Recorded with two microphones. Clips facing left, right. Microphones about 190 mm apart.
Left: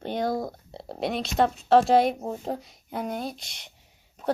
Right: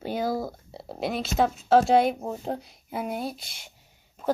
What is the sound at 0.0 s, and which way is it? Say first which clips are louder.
Speech: even; 5° right (ahead or behind).